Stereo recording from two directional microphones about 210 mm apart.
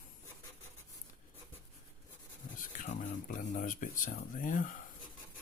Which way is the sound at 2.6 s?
40° left (ahead or behind).